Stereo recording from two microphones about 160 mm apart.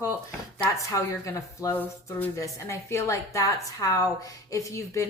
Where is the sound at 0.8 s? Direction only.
20° left (ahead or behind).